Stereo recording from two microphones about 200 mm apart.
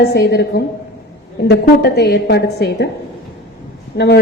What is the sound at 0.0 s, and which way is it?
A woman's voice, 55° left (ahead or behind).